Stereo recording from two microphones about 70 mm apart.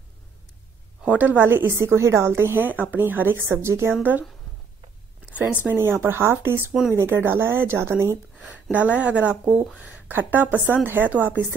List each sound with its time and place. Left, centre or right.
1.0 s speech: right
4.0 s a woman's voice: right
5.5 s a woman's voice: right
5.8 s speech: right
8.7 s a woman's voice: centre